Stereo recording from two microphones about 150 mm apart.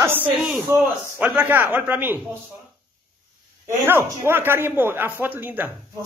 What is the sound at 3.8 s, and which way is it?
A man's voice, 15° right (ahead or behind).